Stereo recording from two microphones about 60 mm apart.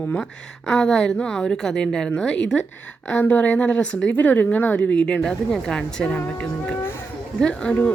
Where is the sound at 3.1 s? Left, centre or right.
Left.